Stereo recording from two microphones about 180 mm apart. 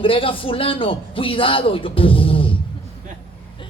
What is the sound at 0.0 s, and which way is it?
A man's voice, 30° left (ahead or behind).